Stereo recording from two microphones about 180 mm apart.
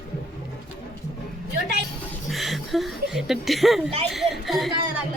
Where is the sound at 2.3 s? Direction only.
Centre (ahead or behind).